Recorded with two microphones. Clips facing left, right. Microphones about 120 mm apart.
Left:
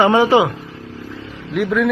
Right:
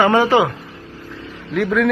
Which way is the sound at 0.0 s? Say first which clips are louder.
Left 1 dB; 20° left (ahead or behind).